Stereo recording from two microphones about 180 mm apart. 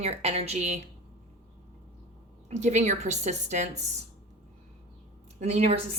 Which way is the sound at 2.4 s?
40° right (ahead or behind).